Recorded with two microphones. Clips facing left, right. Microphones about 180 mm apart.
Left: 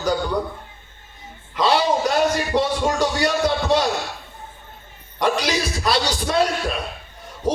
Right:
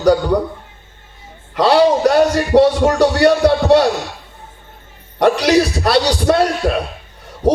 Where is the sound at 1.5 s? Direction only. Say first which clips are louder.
Right 7 dB; 65° right (ahead or behind).